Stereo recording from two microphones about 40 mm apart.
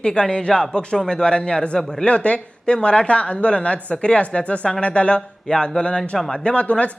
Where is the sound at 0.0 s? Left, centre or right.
Left.